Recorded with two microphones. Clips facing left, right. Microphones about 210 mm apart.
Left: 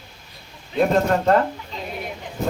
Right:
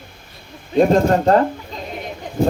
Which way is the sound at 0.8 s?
35° right (ahead or behind).